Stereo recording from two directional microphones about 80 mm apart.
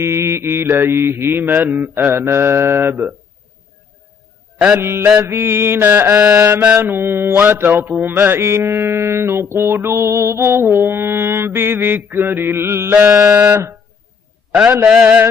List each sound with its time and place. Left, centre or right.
0.0 s mantra: right
4.7 s mantra: right
13.3 s mantra: centre
14.9 s mantra: centre